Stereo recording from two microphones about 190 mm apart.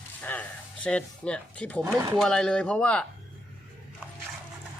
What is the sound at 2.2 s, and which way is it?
Speech, 5° left (ahead or behind).